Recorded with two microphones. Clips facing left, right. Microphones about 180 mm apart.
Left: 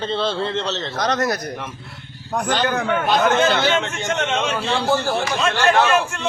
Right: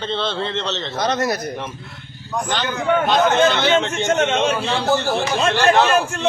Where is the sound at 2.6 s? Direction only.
60° left (ahead or behind).